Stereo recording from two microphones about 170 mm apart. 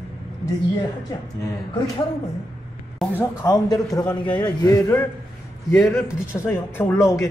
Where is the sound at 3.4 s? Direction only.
20° left (ahead or behind).